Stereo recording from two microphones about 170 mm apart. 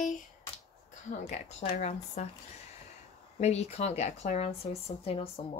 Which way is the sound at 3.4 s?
40° left (ahead or behind).